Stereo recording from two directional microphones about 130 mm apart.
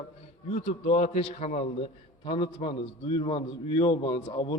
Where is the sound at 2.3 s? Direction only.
40° left (ahead or behind).